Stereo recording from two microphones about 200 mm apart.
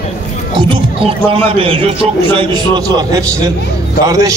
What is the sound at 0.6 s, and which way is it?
A man's voice, 25° right (ahead or behind).